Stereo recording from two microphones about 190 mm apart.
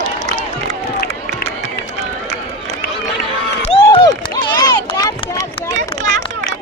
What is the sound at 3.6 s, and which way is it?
Run, 30° left (ahead or behind).